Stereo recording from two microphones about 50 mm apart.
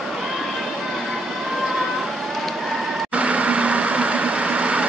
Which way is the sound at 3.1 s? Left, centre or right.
Right.